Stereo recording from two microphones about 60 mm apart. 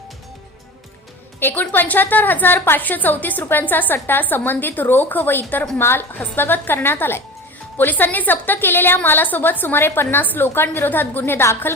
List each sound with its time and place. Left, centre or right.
1.4 s a woman's voice: left